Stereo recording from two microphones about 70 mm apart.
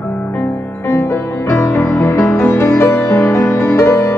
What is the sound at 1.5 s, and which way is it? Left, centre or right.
Music, left.